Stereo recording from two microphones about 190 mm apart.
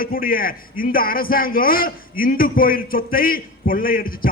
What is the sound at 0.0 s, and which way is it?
A man's voice, 50° left (ahead or behind).